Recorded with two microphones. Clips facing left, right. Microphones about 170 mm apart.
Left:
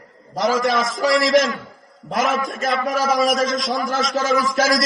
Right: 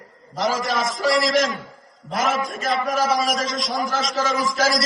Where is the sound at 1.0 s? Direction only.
45° left (ahead or behind).